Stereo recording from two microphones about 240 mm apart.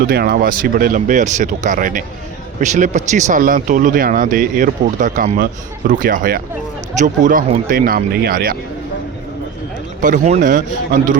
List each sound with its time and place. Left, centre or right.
0.1 s speech: right
10.0 s speech: right